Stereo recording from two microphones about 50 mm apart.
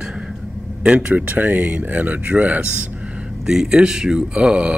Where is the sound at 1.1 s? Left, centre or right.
Right.